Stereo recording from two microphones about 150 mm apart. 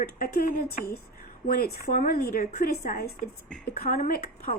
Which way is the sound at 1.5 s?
90° left.